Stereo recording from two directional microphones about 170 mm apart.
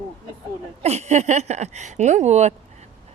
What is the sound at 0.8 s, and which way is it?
Speech, 40° right (ahead or behind).